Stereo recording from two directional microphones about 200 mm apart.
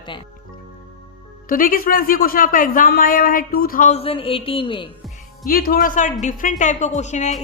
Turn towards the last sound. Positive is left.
turn(degrees=35)  # may be behind; listen again after turning